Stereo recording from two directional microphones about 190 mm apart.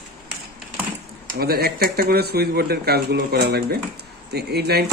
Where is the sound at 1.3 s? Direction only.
55° right (ahead or behind).